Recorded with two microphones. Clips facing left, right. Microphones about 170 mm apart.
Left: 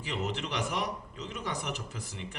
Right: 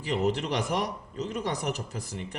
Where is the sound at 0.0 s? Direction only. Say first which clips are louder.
Right 7 dB; 35° right (ahead or behind).